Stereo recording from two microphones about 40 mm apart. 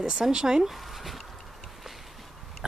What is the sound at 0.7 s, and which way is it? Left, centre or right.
Dog, centre.